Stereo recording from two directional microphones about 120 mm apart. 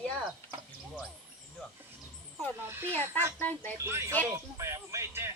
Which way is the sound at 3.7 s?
20° right (ahead or behind).